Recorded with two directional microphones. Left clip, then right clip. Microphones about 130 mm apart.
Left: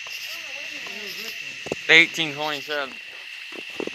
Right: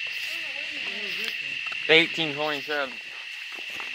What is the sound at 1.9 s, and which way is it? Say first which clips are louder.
Speech: left 4 dB; 25° left (ahead or behind).